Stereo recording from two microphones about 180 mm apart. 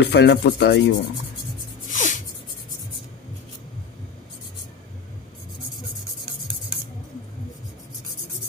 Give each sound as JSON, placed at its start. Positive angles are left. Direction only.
{"t": 0.0, "sound": "rub", "side_deg": 70}
{"t": 1.9, "sound": "sneeze", "side_deg": 45}